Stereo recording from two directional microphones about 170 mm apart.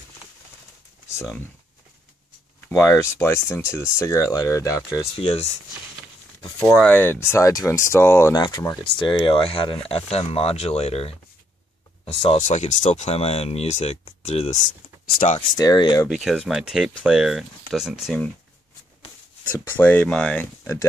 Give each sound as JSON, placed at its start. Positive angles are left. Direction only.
{"t": 2.6, "sound": "speech", "side_deg": 10}
{"t": 5.1, "sound": "speech", "side_deg": 35}
{"t": 6.7, "sound": "speech", "side_deg": 10}
{"t": 12.4, "sound": "speech", "side_deg": 45}
{"t": 15.0, "sound": "speech", "side_deg": 50}
{"t": 15.5, "sound": "speech", "side_deg": 25}
{"t": 16.1, "sound": "speech", "side_deg": 0}
{"t": 19.6, "sound": "speech", "side_deg": 10}